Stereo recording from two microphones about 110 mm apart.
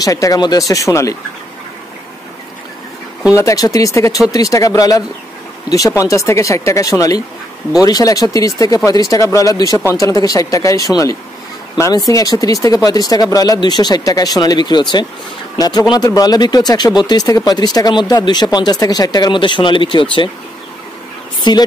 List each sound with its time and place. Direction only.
0.0 s speech: 30° left (ahead or behind)
3.3 s speech: 30° left (ahead or behind)
12.1 s speech: 30° left (ahead or behind); by 20.2 s 50° left (ahead or behind)
21.5 s speech: 45° left (ahead or behind)